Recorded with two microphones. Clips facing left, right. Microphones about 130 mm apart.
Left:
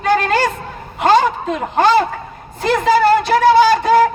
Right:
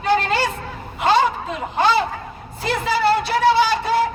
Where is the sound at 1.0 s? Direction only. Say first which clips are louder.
Left 4 dB; 45° left (ahead or behind).